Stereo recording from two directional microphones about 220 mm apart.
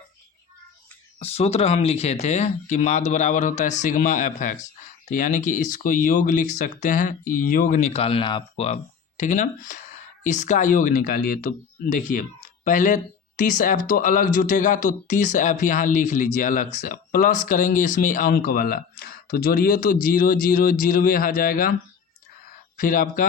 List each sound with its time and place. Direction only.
1.2 s speech: 30° left (ahead or behind)
22.8 s speech: 40° left (ahead or behind)